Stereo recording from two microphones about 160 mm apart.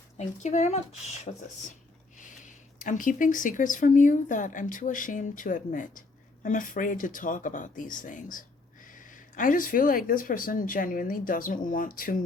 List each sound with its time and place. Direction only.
0.2 s speech: 45° left (ahead or behind)
2.1 s speech: 55° left (ahead or behind)